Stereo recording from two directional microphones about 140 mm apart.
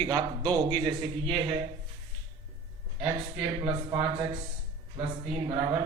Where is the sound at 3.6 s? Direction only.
35° right (ahead or behind).